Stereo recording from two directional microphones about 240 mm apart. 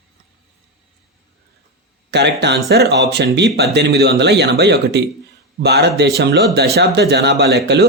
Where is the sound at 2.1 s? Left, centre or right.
Right.